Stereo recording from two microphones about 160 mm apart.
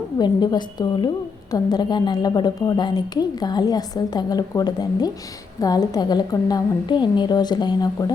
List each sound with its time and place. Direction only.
0.2 s a woman's voice: 25° left (ahead or behind)